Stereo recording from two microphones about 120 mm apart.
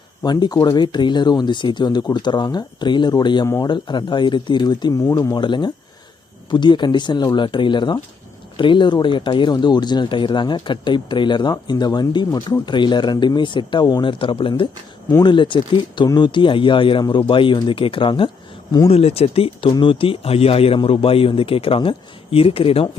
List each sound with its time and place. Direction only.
0.3 s speech: 35° left (ahead or behind)
3.4 s speech: 25° left (ahead or behind)
3.7 s speech: 40° left (ahead or behind)
18.9 s speech: 55° left (ahead or behind)